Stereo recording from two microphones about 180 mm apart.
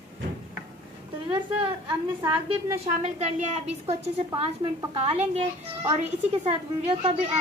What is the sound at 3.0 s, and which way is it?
A woman's voice, 40° right (ahead or behind).